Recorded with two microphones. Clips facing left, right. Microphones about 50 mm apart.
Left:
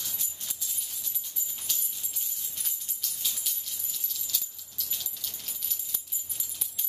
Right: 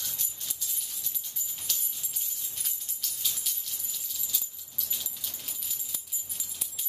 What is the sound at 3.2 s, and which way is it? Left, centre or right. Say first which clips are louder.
Music: even; centre.